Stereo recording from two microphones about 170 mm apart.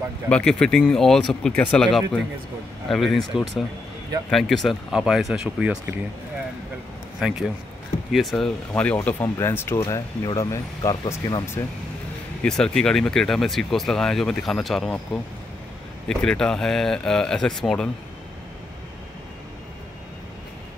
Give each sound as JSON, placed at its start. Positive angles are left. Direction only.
{"t": 0.3, "sound": "speech", "side_deg": 5}
{"t": 7.2, "sound": "speech", "side_deg": 0}
{"t": 12.4, "sound": "speech", "side_deg": 5}
{"t": 16.1, "sound": "speech", "side_deg": 5}